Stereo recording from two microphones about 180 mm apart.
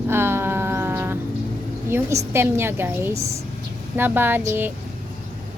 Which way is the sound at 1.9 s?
15° right (ahead or behind).